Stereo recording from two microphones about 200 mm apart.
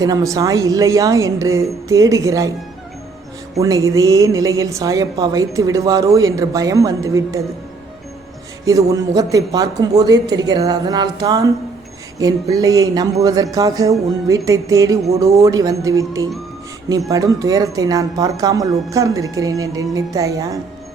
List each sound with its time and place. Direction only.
0.0 s speech: 15° right (ahead or behind)
3.5 s speech: 15° right (ahead or behind)
8.6 s a man's voice: 15° right (ahead or behind)